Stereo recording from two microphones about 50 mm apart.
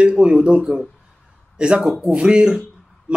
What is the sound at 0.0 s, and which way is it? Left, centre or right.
Speech, right.